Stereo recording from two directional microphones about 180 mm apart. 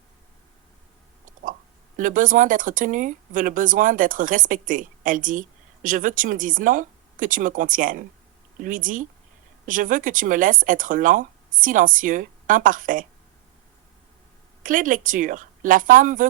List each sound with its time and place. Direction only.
2.0 s speech: 45° right (ahead or behind)
14.6 s speech: 50° right (ahead or behind)